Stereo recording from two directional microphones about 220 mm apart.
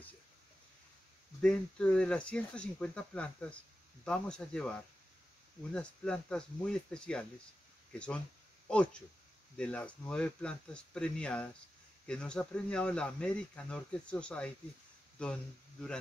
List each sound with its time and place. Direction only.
1.4 s speech: 5° left (ahead or behind)
9.6 s speech: 5° left (ahead or behind)